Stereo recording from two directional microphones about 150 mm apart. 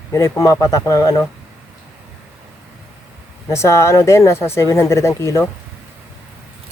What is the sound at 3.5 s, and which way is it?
Speech, 20° left (ahead or behind).